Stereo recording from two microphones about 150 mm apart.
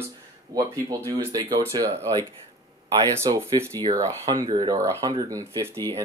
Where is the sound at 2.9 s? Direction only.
25° right (ahead or behind).